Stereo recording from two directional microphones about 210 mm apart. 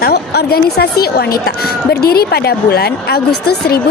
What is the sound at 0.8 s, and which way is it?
A woman's voice, 50° left (ahead or behind).